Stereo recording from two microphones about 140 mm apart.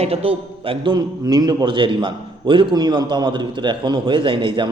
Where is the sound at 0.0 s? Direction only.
45° right (ahead or behind).